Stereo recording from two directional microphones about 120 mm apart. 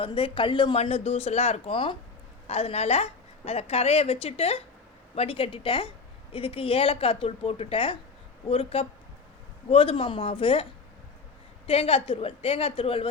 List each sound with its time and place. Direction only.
0.0 s speech: 50° left (ahead or behind)
0.8 s a woman's voice: 55° left (ahead or behind)
2.5 s a woman's voice: 60° left (ahead or behind)